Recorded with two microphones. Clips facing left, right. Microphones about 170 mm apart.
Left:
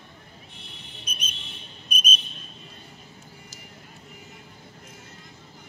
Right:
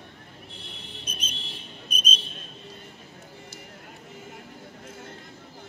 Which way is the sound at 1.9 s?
10° left (ahead or behind).